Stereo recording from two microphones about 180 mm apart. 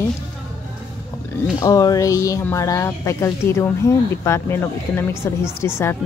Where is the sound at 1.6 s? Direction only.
20° left (ahead or behind).